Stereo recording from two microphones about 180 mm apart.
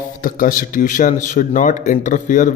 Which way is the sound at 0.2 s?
50° left (ahead or behind).